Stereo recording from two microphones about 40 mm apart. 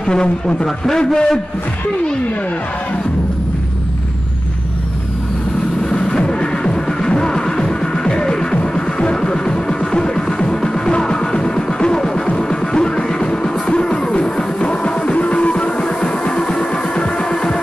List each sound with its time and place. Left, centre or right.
0.0 s a man's voice: left
5.9 s music: centre